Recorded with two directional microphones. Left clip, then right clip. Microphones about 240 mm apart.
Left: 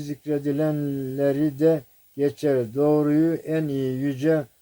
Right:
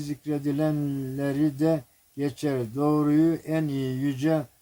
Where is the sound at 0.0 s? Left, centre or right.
Centre.